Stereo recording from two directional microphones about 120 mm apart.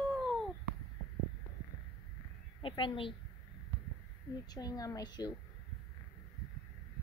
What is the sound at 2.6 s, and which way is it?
Speech, 45° left (ahead or behind).